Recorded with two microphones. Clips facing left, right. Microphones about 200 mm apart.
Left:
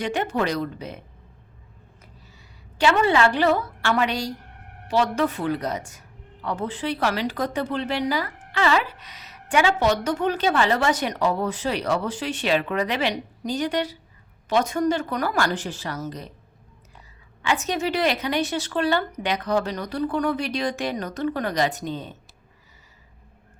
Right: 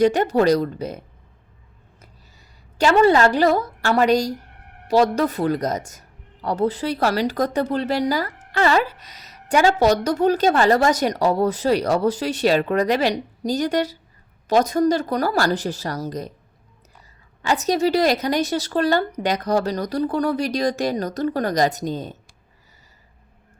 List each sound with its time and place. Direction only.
0.0 s speech: 40° right (ahead or behind)
2.7 s speech: 40° right (ahead or behind)
17.4 s speech: 40° right (ahead or behind)